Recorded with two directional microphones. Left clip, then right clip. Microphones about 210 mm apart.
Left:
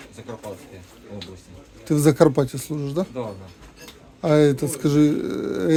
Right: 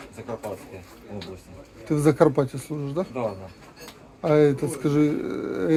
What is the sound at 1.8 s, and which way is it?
Speech, 55° left (ahead or behind).